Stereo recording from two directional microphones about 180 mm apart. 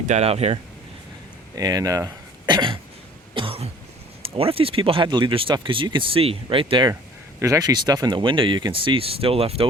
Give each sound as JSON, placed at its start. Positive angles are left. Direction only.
{"t": 0.0, "sound": "speech", "side_deg": -40}
{"t": 1.5, "sound": "speech", "side_deg": -20}
{"t": 3.3, "sound": "cough", "side_deg": -30}
{"t": 4.2, "sound": "speech", "side_deg": -30}